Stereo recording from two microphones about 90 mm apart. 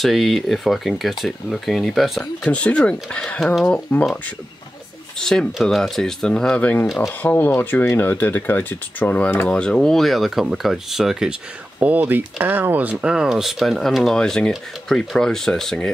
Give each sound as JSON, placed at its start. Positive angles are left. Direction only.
{"t": 0.0, "sound": "speech", "side_deg": 0}
{"t": 2.4, "sound": "speech", "side_deg": 15}
{"t": 5.2, "sound": "speech", "side_deg": 5}
{"t": 11.8, "sound": "speech", "side_deg": -20}